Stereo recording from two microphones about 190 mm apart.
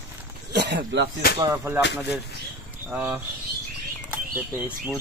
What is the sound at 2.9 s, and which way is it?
Speech, 10° right (ahead or behind).